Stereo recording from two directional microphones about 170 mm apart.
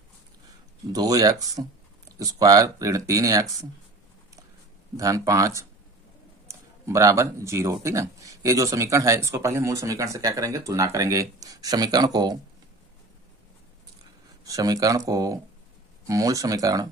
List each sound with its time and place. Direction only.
0.9 s speech: 20° right (ahead or behind)
4.9 s speech: 20° right (ahead or behind)
14.4 s speech: 20° right (ahead or behind)